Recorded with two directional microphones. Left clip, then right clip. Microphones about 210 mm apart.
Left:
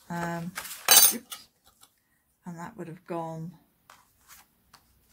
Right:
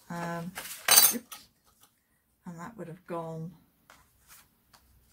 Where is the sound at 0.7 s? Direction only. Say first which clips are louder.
Left 3 dB; 20° left (ahead or behind).